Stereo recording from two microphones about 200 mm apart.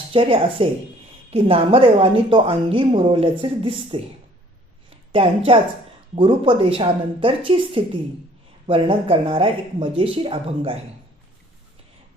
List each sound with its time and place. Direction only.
0.1 s a woman's voice: 25° right (ahead or behind)
5.2 s a woman's voice: 30° right (ahead or behind)